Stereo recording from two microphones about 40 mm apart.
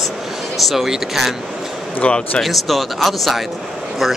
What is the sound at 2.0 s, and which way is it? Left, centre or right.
Speech, left.